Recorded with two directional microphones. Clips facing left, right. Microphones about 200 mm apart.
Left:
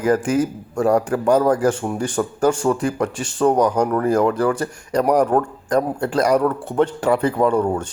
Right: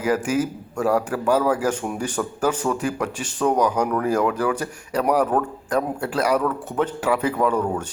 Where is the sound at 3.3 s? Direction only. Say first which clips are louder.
Left 4 dB; 10° left (ahead or behind).